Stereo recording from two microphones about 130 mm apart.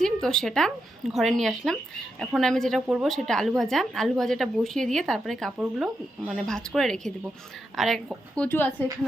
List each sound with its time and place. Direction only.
0.0 s a woman's voice: 5° left (ahead or behind)
8.4 s speech: 15° left (ahead or behind)